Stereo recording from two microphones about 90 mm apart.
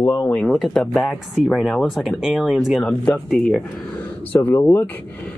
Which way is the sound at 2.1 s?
5° right (ahead or behind).